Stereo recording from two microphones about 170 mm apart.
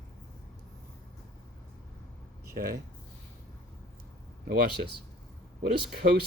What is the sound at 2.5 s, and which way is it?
Speech, 65° right (ahead or behind).